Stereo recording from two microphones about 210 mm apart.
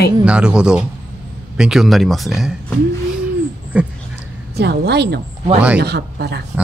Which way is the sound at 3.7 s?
5° right (ahead or behind).